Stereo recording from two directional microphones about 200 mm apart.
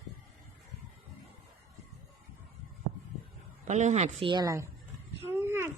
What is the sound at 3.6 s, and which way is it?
Speech, 35° right (ahead or behind).